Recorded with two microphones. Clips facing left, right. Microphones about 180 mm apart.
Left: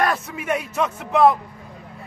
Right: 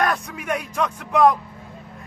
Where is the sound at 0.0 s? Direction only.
5° left (ahead or behind).